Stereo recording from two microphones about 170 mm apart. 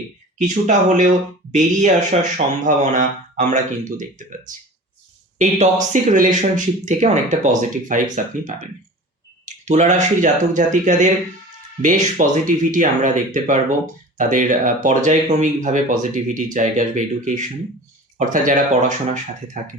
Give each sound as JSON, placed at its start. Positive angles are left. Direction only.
{"t": 0.4, "sound": "speech", "side_deg": -45}
{"t": 5.4, "sound": "speech", "side_deg": -45}
{"t": 9.5, "sound": "speech", "side_deg": -45}